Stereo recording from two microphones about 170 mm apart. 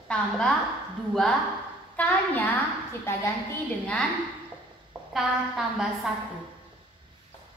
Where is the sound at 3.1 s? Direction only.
15° left (ahead or behind).